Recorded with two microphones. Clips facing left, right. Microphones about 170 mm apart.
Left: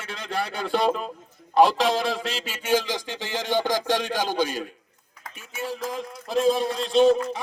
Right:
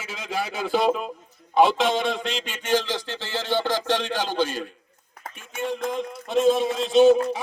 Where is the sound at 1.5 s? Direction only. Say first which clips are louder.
Even; centre (ahead or behind).